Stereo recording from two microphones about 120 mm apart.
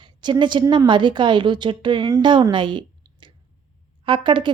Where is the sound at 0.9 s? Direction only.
40° right (ahead or behind).